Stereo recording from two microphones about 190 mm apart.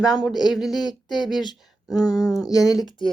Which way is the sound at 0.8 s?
20° left (ahead or behind).